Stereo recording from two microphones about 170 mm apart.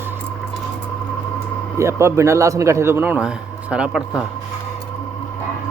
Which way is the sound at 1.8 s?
15° right (ahead or behind).